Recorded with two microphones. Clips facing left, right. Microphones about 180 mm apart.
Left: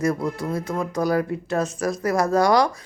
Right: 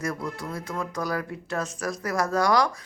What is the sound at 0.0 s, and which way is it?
Speech, 30° left (ahead or behind).